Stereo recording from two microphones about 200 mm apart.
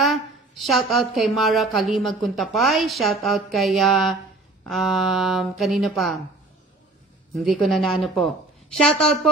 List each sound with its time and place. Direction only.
0.0 s a woman's voice: centre (ahead or behind)
7.3 s a woman's voice: centre (ahead or behind)